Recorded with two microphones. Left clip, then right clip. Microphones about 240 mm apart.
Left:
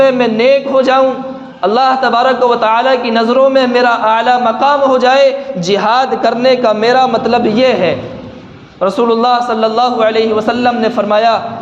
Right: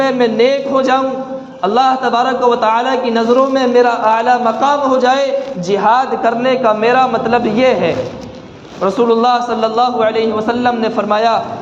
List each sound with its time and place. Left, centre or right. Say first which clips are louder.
0.0 s a man's voice: left 3 dB; left